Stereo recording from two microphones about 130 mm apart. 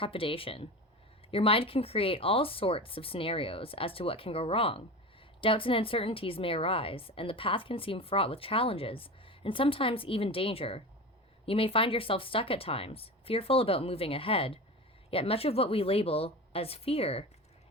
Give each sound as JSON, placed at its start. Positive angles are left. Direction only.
{"t": 0.0, "sound": "a woman's voice", "side_deg": 45}